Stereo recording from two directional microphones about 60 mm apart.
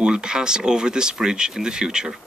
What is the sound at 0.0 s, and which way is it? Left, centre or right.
Speech, centre.